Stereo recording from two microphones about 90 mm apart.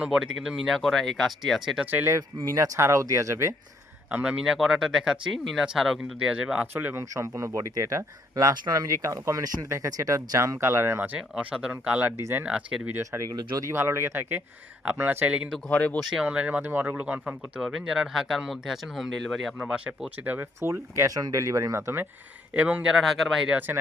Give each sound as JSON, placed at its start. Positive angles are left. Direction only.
{"t": 0.0, "sound": "speech", "side_deg": -5}
{"t": 1.8, "sound": "speech", "side_deg": -20}
{"t": 2.0, "sound": "speech", "side_deg": -35}
{"t": 4.1, "sound": "speech", "side_deg": -15}
{"t": 7.1, "sound": "speech", "side_deg": -35}
{"t": 11.1, "sound": "speech", "side_deg": -15}
{"t": 13.0, "sound": "speech", "side_deg": -35}
{"t": 15.7, "sound": "speech", "side_deg": 15}
{"t": 16.0, "sound": "speech", "side_deg": -5}
{"t": 16.2, "sound": "speech", "side_deg": -15}
{"t": 17.6, "sound": "speech", "side_deg": 0}
{"t": 20.6, "sound": "speech", "side_deg": -30}
{"t": 22.5, "sound": "speech", "side_deg": -15}
{"t": 23.0, "sound": "speech", "side_deg": 0}